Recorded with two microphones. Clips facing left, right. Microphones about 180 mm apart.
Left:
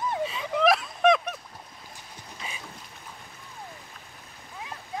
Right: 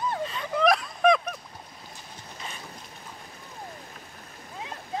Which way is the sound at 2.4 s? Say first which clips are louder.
Even; 10° left (ahead or behind).